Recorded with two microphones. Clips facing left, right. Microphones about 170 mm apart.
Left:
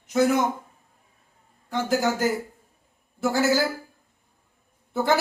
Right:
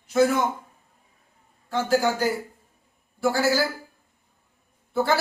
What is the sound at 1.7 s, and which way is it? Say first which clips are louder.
Speech: right 2 dB; 20° left (ahead or behind).